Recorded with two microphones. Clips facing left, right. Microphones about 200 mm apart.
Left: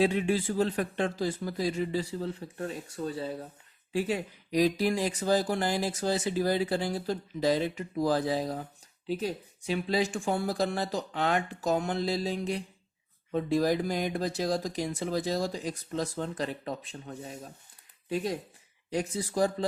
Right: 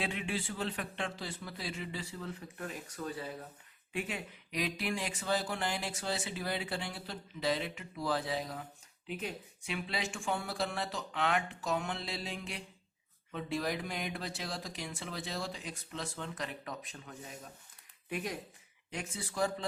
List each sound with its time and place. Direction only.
0.0 s speech: 40° left (ahead or behind)